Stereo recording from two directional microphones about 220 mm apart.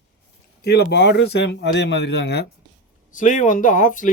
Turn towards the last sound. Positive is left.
turn(degrees=35)  # may be behind; listen again after turning